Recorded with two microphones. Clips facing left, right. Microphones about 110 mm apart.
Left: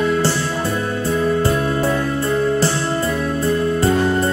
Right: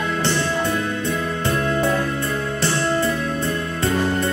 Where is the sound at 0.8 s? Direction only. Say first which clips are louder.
Left 4 dB; 35° left (ahead or behind).